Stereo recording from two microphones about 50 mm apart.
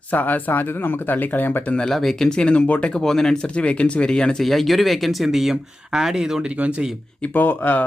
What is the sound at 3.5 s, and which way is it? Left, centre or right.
Speech, left.